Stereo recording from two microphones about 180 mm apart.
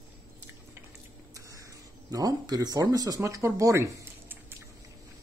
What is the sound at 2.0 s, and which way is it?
Speech, 20° right (ahead or behind).